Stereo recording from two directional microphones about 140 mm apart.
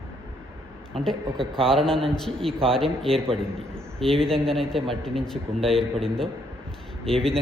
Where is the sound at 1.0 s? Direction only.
5° left (ahead or behind).